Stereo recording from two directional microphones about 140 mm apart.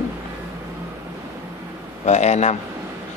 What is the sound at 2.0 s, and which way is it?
Speech, 55° left (ahead or behind).